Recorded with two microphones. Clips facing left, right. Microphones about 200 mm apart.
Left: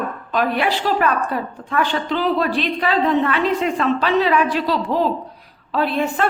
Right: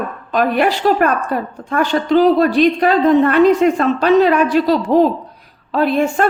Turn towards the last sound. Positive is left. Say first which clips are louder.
# right 5 dB
turn(degrees=-45)  # may be behind; listen again after turning